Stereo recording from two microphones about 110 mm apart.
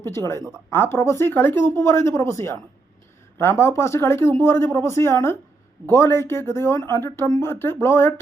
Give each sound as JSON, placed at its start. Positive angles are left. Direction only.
{"t": 0.0, "sound": "speech", "side_deg": 25}